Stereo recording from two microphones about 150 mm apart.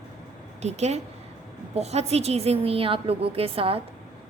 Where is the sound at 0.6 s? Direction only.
45° right (ahead or behind).